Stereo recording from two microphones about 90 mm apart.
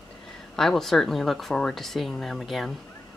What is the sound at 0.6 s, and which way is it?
Speech, 5° left (ahead or behind).